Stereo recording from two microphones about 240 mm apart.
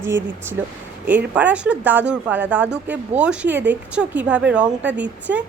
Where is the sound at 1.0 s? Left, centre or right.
Centre.